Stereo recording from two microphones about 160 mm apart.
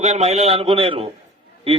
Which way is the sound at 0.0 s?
45° right (ahead or behind).